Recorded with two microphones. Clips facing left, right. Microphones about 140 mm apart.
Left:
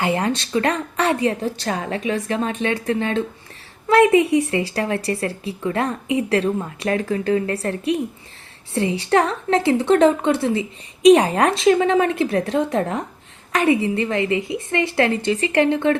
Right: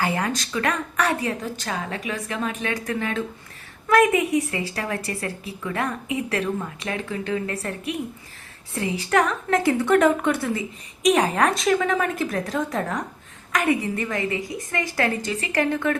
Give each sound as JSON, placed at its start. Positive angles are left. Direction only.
{"t": 0.0, "sound": "a woman's voice", "side_deg": 25}